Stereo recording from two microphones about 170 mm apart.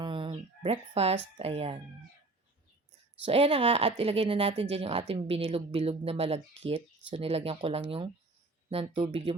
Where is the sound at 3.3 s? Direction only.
35° right (ahead or behind).